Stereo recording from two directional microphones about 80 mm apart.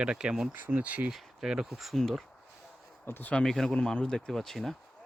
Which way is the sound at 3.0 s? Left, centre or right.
Left.